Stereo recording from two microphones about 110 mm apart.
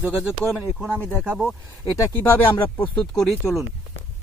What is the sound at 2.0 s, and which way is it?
Speech, 20° left (ahead or behind).